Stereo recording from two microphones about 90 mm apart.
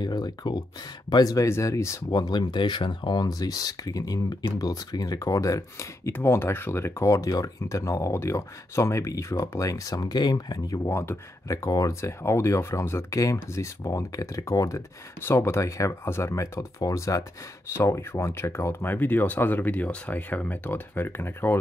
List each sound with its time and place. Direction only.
0.0 s speech: 50° left (ahead or behind); by 2.0 s 35° left (ahead or behind)
2.0 s speech: 50° left (ahead or behind); by 21.5 s 25° left (ahead or behind)